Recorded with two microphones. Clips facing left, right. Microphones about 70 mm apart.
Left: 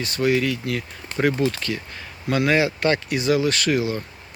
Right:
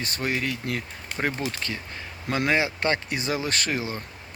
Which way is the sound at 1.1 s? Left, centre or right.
Centre.